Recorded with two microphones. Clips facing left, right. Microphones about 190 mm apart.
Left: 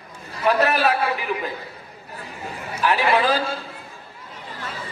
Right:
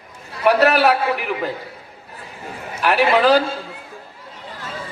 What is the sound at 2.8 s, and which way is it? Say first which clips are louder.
Speech: right 3 dB; 70° right (ahead or behind).